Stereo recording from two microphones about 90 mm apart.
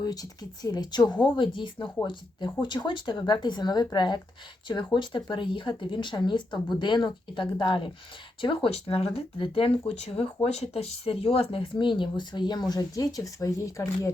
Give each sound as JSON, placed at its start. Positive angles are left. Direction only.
{"t": 0.0, "sound": "speech", "side_deg": 45}
{"t": 1.4, "sound": "speech", "side_deg": 65}